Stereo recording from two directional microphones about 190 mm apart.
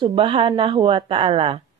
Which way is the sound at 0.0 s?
25° right (ahead or behind).